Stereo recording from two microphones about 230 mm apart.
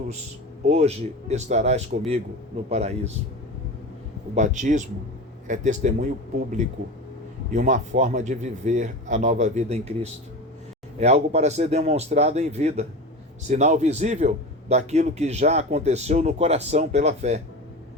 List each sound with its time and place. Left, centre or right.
0.6 s a man's voice: right
4.4 s speech: right
7.5 s a man's voice: right